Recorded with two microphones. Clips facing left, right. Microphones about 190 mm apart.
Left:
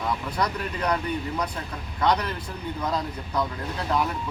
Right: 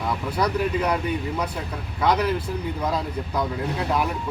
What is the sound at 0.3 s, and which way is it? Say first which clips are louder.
Speech: right 5 dB; 5° right (ahead or behind).